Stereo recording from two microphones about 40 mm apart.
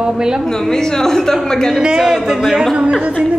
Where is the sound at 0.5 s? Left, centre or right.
Centre.